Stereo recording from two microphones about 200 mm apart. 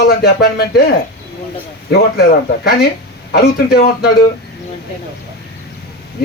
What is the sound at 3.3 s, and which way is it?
Speech, 50° left (ahead or behind).